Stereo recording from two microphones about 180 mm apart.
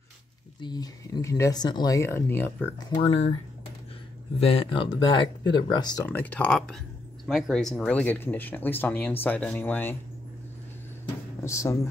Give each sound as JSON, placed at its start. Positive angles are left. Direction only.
{"t": 0.6, "sound": "speech", "side_deg": 25}
{"t": 2.9, "sound": "speech", "side_deg": 30}
{"t": 4.4, "sound": "speech", "side_deg": 30}
{"t": 6.0, "sound": "speech", "side_deg": 10}
{"t": 11.4, "sound": "speech", "side_deg": 15}